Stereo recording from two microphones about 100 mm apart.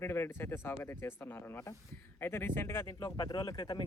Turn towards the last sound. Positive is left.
turn(degrees=45)  # may be behind; listen again after turning